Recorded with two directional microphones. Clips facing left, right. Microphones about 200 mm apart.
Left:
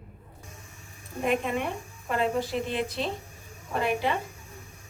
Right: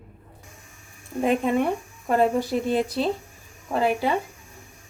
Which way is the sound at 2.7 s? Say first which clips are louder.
Right 7 dB; 40° right (ahead or behind).